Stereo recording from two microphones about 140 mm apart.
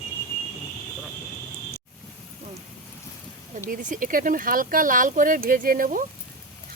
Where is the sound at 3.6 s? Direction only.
70° right (ahead or behind).